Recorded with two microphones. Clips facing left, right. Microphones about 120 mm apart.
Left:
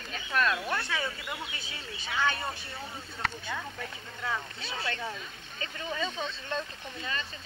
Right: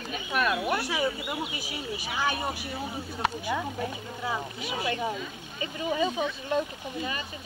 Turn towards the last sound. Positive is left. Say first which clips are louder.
# right 4 dB
turn(degrees=-15)  # may be behind; listen again after turning